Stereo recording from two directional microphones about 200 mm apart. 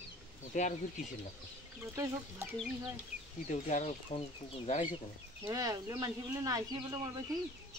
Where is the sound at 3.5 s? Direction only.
40° left (ahead or behind).